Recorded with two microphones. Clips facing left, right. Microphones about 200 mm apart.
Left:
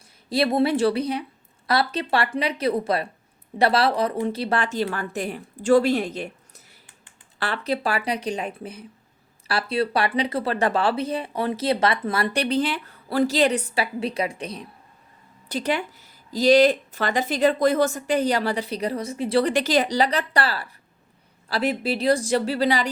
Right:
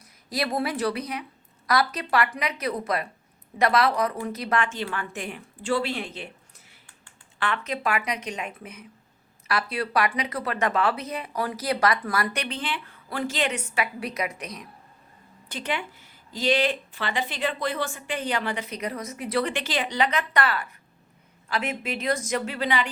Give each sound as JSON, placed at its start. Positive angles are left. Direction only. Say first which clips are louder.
{"t": 0.3, "sound": "speech", "louder": "left 7 dB", "side_deg": 25}
{"t": 7.3, "sound": "speech", "louder": "left 3 dB", "side_deg": 35}